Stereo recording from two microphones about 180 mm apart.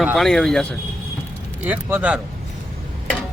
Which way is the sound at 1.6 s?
10° right (ahead or behind).